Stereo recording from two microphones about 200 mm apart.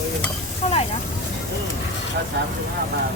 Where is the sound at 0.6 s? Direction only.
30° left (ahead or behind).